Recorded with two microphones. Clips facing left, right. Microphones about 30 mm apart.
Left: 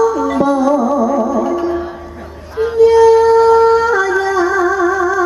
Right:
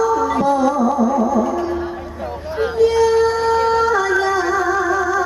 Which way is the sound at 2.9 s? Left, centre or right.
Centre.